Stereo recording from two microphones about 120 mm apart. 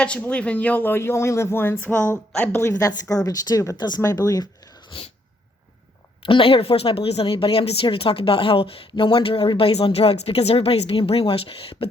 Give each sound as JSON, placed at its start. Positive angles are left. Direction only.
{"t": 0.0, "sound": "speech", "side_deg": 10}
{"t": 4.9, "sound": "sneeze", "side_deg": 50}
{"t": 6.2, "sound": "speech", "side_deg": 50}